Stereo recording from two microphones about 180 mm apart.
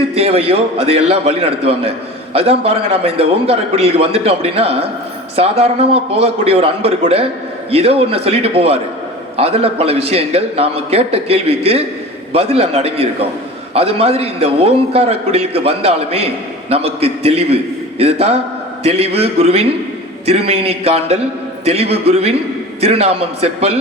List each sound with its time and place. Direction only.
0.1 s a man's voice: 35° right (ahead or behind)